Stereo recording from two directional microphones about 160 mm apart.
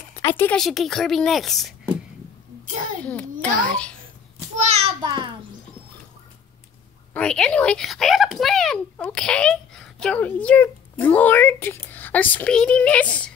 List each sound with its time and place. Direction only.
0.1 s speech: 15° left (ahead or behind)
0.6 s a woman's voice: centre (ahead or behind)
3.0 s a child's voice: 10° left (ahead or behind)
4.6 s child singing: 40° right (ahead or behind)
5.0 s a child's voice: 30° right (ahead or behind)
7.2 s speech: 5° left (ahead or behind)